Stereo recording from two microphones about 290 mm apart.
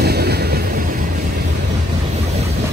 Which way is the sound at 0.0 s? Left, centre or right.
Right.